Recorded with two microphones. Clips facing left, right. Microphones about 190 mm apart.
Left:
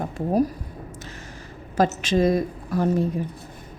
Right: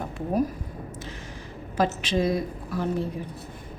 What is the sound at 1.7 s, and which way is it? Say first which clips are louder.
A woman's voice: left 4 dB; 45° left (ahead or behind).